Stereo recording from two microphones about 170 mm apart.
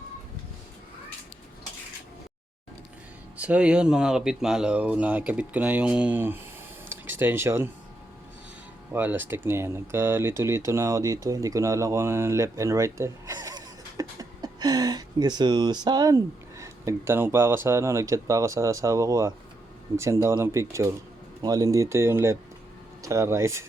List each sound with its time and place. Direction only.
3.3 s speech: 10° right (ahead or behind)
8.9 s speech: 10° right (ahead or behind)